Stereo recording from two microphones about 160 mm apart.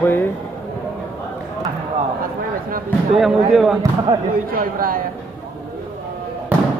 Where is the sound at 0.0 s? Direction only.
10° left (ahead or behind).